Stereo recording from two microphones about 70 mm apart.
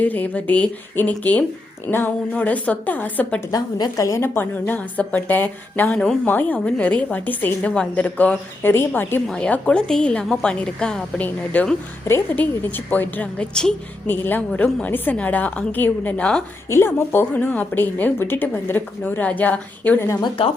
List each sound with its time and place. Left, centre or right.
0.0 s a woman's voice: left
3.5 s a woman's voice: left
4.2 s a woman's voice: left
4.7 s a woman's voice: left
9.2 s a woman's voice: centre
13.5 s a woman's voice: centre
14.1 s a woman's voice: left
16.6 s a woman's voice: left